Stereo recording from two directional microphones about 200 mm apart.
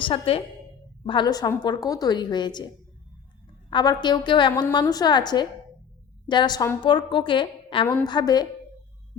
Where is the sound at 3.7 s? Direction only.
20° left (ahead or behind).